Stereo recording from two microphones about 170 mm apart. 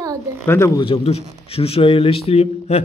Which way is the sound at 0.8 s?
30° left (ahead or behind).